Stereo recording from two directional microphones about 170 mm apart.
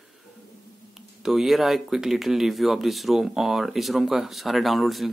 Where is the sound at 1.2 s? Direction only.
Centre (ahead or behind).